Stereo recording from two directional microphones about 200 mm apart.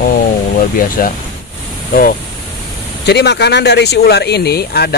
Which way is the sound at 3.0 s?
55° left (ahead or behind).